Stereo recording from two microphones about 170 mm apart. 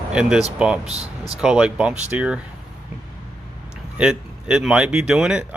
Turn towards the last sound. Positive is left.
turn(degrees=-5)  # may be behind; listen again after turning